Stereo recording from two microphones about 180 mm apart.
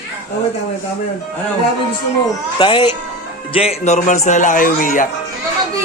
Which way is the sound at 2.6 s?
25° left (ahead or behind).